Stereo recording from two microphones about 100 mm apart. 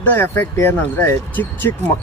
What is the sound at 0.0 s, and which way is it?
A man's voice, 20° left (ahead or behind).